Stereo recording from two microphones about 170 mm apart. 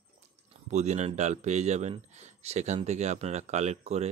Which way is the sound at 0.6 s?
40° right (ahead or behind).